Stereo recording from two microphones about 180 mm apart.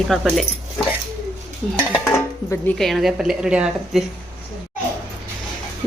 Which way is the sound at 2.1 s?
15° left (ahead or behind).